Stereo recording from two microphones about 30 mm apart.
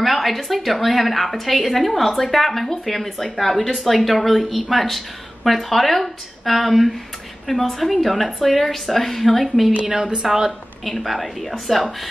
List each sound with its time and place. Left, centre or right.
0.0 s a woman's voice: centre
9.8 s a woman's voice: right
10.9 s a woman's voice: centre